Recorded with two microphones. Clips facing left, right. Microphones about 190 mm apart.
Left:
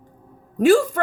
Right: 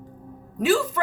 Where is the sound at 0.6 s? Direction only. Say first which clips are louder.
Left 6 dB; 50° left (ahead or behind).